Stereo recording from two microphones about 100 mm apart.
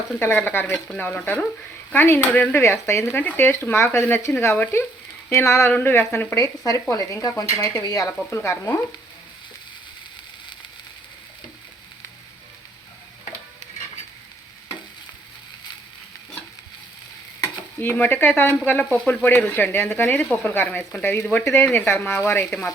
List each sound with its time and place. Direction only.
0.2 s speech: 20° left (ahead or behind)
6.9 s stir: 40° left (ahead or behind)
17.4 s speech: 20° left (ahead or behind)